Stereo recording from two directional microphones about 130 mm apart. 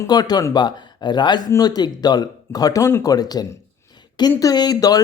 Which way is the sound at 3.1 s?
30° left (ahead or behind).